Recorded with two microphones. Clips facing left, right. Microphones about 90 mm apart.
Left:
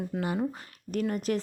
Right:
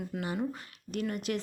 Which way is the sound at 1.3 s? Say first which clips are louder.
Left 4 dB; 35° left (ahead or behind).